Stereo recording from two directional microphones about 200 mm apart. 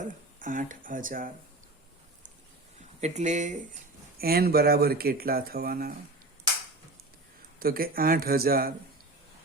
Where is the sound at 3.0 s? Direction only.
35° right (ahead or behind).